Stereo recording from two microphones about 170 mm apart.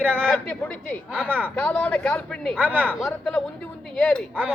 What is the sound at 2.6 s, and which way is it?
Speech, 10° right (ahead or behind).